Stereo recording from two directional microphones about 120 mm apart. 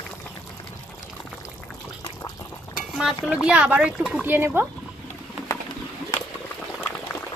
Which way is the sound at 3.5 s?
10° right (ahead or behind).